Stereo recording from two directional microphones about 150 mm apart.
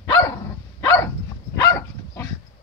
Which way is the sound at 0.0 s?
20° left (ahead or behind).